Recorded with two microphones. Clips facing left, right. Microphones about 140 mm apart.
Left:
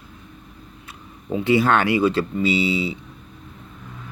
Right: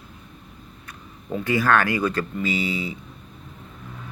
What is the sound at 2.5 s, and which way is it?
Speech, 45° right (ahead or behind).